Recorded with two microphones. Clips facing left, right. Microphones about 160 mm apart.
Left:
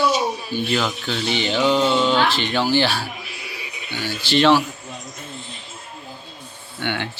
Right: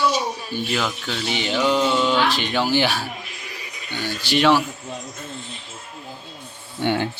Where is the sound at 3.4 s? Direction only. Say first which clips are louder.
Left 2 dB; 45° right (ahead or behind).